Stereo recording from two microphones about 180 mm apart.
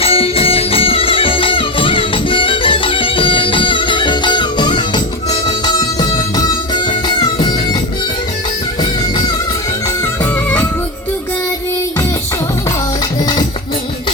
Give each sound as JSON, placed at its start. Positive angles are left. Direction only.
{"t": 0.0, "sound": "music", "side_deg": 30}